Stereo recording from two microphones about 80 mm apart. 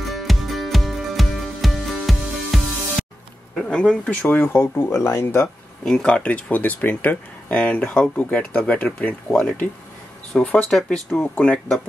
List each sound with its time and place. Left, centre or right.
0.1 s music: centre
3.5 s speech: centre; by 5.5 s left
5.9 s speech: centre